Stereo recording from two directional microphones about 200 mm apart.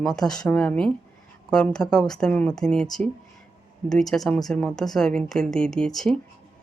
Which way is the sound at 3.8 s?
5° left (ahead or behind).